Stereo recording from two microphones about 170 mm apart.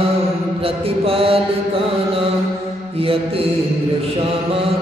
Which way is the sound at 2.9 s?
35° right (ahead or behind).